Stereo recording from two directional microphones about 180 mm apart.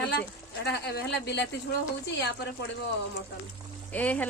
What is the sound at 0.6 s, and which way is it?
Speech, 65° left (ahead or behind).